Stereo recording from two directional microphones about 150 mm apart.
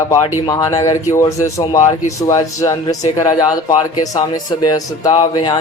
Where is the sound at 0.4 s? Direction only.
25° left (ahead or behind).